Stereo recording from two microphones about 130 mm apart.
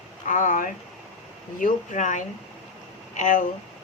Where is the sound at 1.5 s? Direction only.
80° left.